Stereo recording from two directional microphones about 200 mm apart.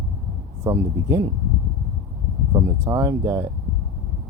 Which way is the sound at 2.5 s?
15° right (ahead or behind).